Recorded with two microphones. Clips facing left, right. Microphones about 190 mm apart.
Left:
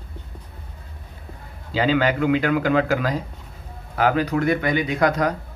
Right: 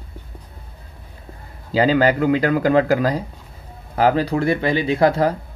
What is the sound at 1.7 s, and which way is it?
Speech, 40° right (ahead or behind).